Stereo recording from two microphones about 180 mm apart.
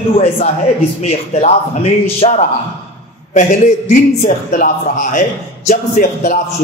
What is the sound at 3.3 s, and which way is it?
A man's voice, 40° left (ahead or behind).